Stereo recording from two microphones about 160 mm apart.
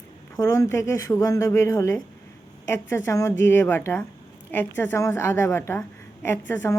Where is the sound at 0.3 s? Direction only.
20° left (ahead or behind).